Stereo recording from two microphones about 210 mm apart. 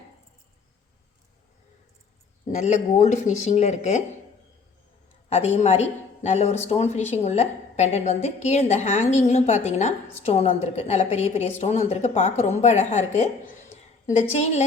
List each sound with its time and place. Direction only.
2.5 s a woman's voice: 35° left (ahead or behind)
5.3 s a woman's voice: 30° left (ahead or behind)